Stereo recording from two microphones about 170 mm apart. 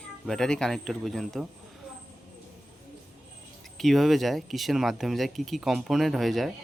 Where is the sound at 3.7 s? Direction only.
Centre (ahead or behind).